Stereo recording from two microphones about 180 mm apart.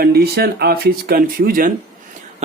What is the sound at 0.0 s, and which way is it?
Speech, 60° right (ahead or behind).